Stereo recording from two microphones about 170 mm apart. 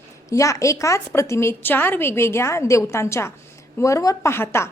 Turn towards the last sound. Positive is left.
turn(degrees=15)  # may be behind; listen again after turning